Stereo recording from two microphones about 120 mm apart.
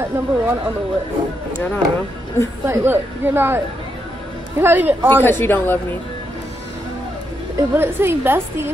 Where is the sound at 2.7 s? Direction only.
20° right (ahead or behind).